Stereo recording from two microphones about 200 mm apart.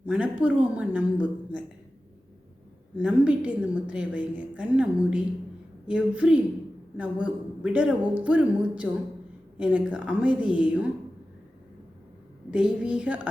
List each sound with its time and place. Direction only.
0.0 s a woman's voice: 5° right (ahead or behind)
3.0 s a woman's voice: 5° right (ahead or behind)
12.5 s a woman's voice: 5° right (ahead or behind)